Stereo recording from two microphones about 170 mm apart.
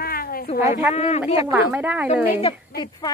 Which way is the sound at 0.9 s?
40° left (ahead or behind).